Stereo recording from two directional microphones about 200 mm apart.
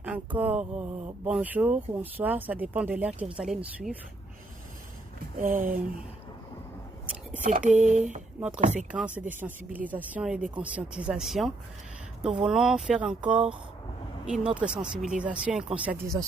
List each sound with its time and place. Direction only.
0.0 s speech: 10° right (ahead or behind)
5.4 s speech: 40° right (ahead or behind)
7.4 s speech: 40° right (ahead or behind)
8.4 s speech: 5° right (ahead or behind)
8.6 s speech: 40° right (ahead or behind)
8.9 s speech: 5° right (ahead or behind)